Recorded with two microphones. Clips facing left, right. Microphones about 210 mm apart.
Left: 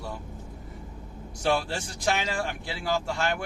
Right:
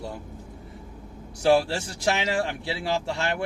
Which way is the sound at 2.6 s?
30° right (ahead or behind).